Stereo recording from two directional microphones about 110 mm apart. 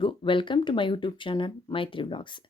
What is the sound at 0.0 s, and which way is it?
Speech, 50° left (ahead or behind).